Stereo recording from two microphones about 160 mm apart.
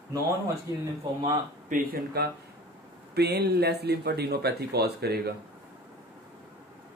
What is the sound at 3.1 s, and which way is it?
Speech, 90° right.